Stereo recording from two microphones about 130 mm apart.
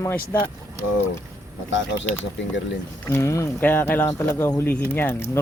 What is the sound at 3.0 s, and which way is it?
Speech, 20° left (ahead or behind).